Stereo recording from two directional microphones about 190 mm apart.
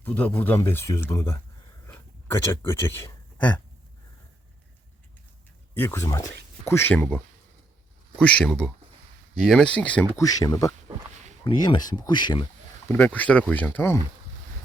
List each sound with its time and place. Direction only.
0.0 s speech: 10° left (ahead or behind)
1.9 s a sound: 10° left (ahead or behind)
5.7 s speech: 10° left (ahead or behind)
8.2 s speech: 5° left (ahead or behind)
10.2 s speech: 20° left (ahead or behind)
12.9 s speech: 10° left (ahead or behind)